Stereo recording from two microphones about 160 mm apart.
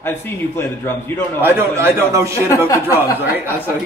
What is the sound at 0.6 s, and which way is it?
Speech, 15° left (ahead or behind).